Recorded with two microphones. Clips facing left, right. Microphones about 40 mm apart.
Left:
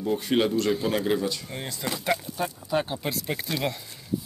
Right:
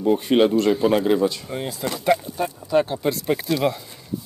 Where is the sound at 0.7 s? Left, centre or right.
Centre.